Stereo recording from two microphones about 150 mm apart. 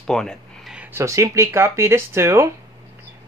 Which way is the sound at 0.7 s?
20° right (ahead or behind).